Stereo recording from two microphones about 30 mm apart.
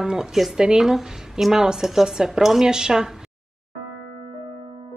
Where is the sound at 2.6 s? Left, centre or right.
Right.